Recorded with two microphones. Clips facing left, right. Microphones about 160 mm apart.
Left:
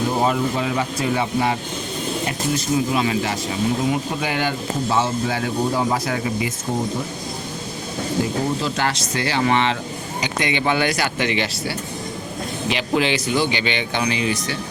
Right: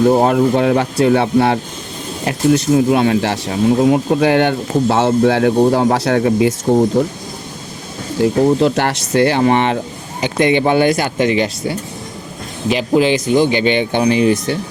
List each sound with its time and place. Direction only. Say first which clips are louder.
0.2 s speech: right 8 dB; 60° right (ahead or behind)
8.2 s speech: right 12 dB; 65° right (ahead or behind)
9.4 s speech: right 6 dB; 50° right (ahead or behind)
12.9 s speech: right 8 dB; 40° right (ahead or behind)